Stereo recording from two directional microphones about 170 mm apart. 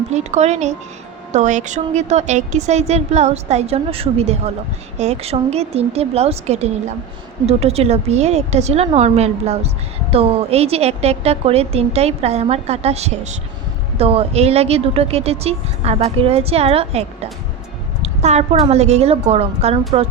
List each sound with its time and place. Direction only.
0.1 s a woman's voice: 40° right (ahead or behind)